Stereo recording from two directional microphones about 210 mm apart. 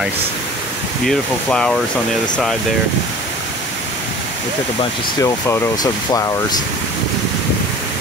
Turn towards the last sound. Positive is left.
turn(degrees=15)  # may be behind; listen again after turning